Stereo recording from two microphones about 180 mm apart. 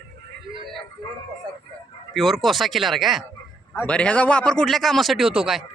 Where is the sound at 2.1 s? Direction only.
Centre (ahead or behind).